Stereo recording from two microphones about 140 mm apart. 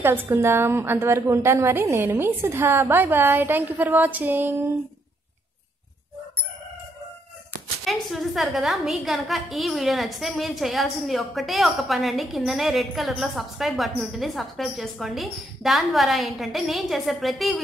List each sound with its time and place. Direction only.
0.0 s a woman's voice: 15° right (ahead or behind)
7.8 s a woman's voice: centre (ahead or behind)